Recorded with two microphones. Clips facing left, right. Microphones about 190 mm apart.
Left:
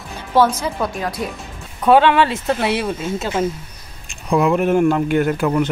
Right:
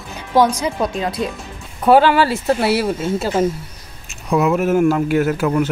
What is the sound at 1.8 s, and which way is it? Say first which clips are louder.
Speech: right 1 dB; 5° right (ahead or behind).